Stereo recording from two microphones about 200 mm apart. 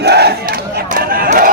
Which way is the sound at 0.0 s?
55° right (ahead or behind).